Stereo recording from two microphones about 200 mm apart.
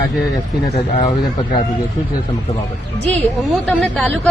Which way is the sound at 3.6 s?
5° left (ahead or behind).